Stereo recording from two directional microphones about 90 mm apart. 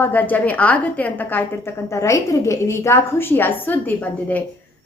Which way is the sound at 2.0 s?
35° left (ahead or behind).